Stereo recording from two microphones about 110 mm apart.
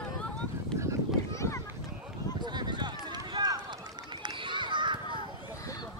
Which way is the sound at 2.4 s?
40° right (ahead or behind).